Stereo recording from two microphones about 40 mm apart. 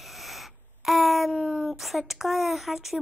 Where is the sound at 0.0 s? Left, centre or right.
Centre.